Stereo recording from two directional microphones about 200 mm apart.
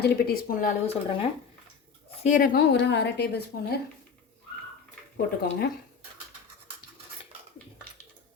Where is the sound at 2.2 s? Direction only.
45° left (ahead or behind); by 3.2 s 60° left (ahead or behind).